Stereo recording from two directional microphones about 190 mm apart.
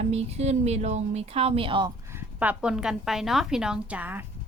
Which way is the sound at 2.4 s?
5° right (ahead or behind).